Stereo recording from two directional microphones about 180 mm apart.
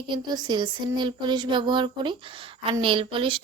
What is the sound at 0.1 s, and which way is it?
A woman's voice, 25° right (ahead or behind).